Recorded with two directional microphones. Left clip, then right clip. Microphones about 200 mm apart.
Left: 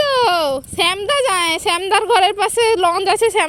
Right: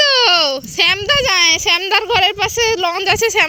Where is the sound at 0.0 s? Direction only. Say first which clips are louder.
Right 3 dB; 15° left (ahead or behind).